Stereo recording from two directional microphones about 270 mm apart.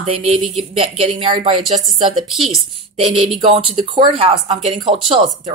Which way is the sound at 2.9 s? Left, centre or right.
Right.